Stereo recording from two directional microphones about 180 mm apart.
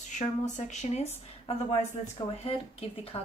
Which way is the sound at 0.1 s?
40° left (ahead or behind).